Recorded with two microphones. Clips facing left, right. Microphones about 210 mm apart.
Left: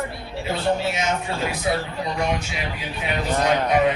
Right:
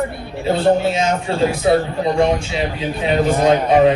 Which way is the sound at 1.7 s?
50° right (ahead or behind).